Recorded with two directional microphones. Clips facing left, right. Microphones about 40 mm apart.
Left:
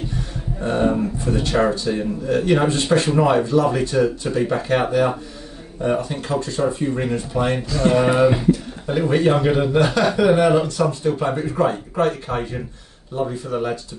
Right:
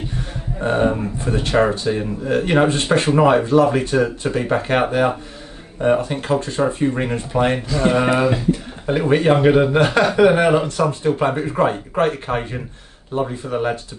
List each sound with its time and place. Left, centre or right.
0.6 s speech: right